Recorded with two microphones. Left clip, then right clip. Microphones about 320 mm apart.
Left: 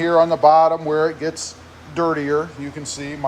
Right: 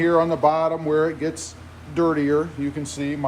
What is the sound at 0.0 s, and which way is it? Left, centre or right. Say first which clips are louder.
Speech: left 4 dB; centre.